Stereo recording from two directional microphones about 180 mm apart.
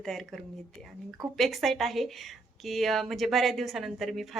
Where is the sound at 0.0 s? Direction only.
Centre (ahead or behind).